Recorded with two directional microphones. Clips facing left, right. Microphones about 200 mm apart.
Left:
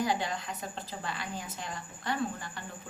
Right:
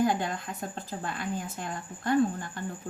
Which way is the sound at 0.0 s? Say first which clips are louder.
Right 4 dB; 50° right (ahead or behind).